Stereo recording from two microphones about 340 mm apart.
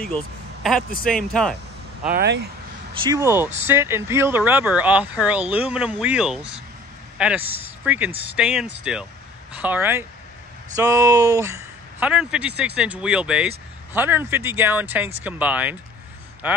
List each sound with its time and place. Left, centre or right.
1.0 s speech: centre
2.1 s speech: right
3.0 s speech: centre